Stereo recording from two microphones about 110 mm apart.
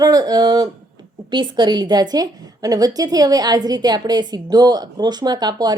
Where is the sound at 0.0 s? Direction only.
35° right (ahead or behind).